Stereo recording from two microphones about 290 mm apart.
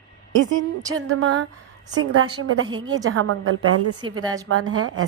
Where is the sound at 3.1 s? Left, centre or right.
Right.